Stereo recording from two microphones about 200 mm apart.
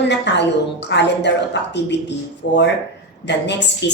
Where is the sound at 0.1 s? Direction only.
60° left (ahead or behind).